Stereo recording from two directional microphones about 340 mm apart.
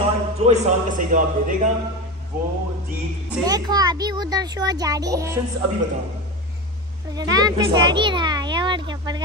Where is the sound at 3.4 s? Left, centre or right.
Centre.